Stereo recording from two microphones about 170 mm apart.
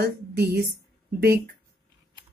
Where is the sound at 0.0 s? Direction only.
75° right (ahead or behind).